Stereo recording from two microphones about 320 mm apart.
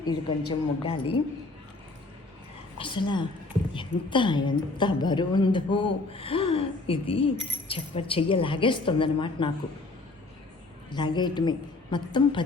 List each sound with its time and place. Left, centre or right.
0.0 s a woman's voice: centre
2.7 s a woman's voice: centre
10.9 s a woman's voice: centre